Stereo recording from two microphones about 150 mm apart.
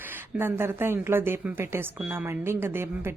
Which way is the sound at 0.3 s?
15° right (ahead or behind).